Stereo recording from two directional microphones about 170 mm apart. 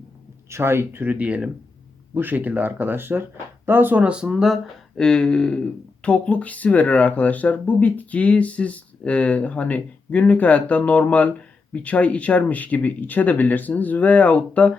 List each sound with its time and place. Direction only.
0.5 s speech: 15° right (ahead or behind); by 14.7 s 10° left (ahead or behind)